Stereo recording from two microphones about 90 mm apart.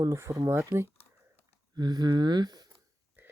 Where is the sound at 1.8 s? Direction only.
50° right (ahead or behind).